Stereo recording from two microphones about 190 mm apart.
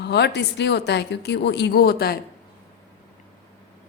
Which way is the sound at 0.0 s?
60° left (ahead or behind).